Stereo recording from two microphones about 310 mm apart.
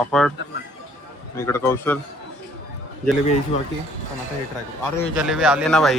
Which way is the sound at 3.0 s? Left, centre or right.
Right.